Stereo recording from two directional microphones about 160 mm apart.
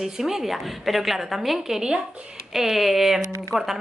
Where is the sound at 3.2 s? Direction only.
20° right (ahead or behind).